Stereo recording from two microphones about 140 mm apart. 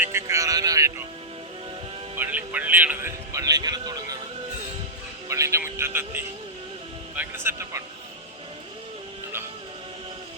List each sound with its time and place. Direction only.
0.0 s speech: 20° right (ahead or behind)
2.1 s a man's voice: 15° right (ahead or behind); by 4.2 s 30° right (ahead or behind)
5.3 s a man's voice: 20° right (ahead or behind)